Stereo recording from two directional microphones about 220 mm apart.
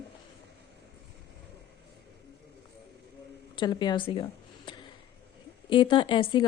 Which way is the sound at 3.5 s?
20° left (ahead or behind).